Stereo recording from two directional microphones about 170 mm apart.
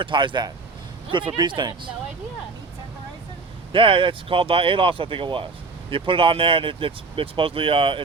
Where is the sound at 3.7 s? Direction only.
30° right (ahead or behind).